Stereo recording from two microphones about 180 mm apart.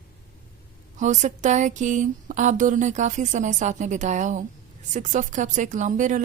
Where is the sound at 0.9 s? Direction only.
40° right (ahead or behind).